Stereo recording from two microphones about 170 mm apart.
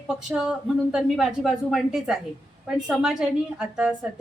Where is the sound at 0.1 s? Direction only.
Centre (ahead or behind).